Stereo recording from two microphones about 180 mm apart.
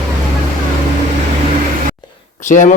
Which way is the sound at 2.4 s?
45° left (ahead or behind).